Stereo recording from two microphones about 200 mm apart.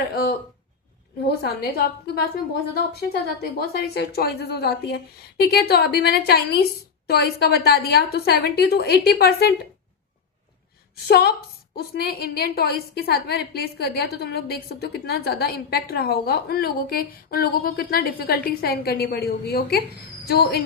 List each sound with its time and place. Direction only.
1.4 s a woman's voice: 50° left (ahead or behind)
11.1 s a woman's voice: 50° left (ahead or behind)